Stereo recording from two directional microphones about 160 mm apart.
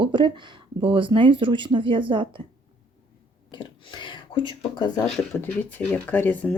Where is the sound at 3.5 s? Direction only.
30° left (ahead or behind).